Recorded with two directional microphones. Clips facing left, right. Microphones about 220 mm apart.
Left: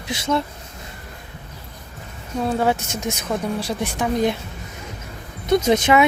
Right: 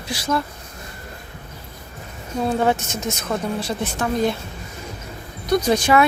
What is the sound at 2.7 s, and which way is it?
Speech, 10° left (ahead or behind).